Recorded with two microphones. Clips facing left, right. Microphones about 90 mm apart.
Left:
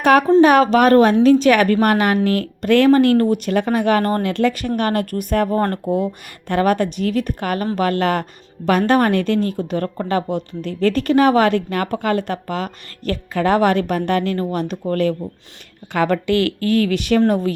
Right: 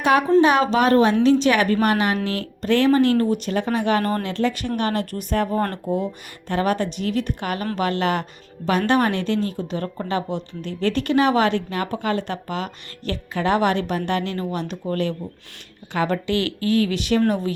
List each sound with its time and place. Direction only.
0.0 s a woman's voice: 55° left (ahead or behind)
15.9 s a woman's voice: 60° left (ahead or behind)